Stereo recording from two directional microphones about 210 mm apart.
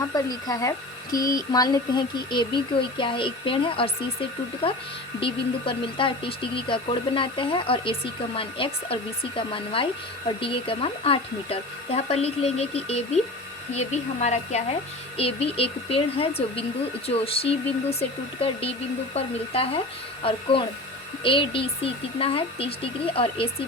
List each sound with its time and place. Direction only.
0.1 s a sound: 15° left (ahead or behind)
2.3 s speech: 20° left (ahead or behind)
5.2 s speech: 25° left (ahead or behind)